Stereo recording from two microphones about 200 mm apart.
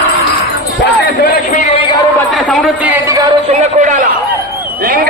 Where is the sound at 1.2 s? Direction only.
45° left (ahead or behind).